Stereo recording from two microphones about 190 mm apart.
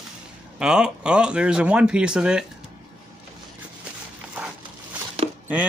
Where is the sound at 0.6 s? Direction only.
5° right (ahead or behind).